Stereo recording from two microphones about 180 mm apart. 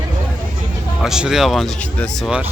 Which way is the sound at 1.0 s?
5° right (ahead or behind).